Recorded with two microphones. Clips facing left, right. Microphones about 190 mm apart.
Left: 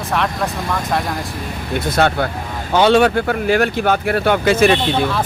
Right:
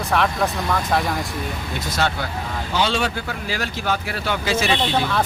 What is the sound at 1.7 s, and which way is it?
Speech, 55° left (ahead or behind).